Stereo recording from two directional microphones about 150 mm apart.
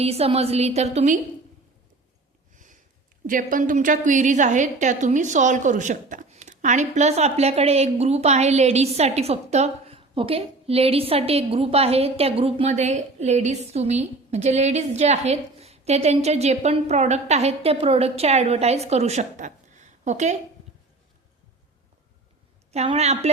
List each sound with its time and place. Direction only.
0.0 s a woman's voice: 40° right (ahead or behind)
3.2 s a woman's voice: 65° right (ahead or behind)
22.7 s a woman's voice: 45° right (ahead or behind)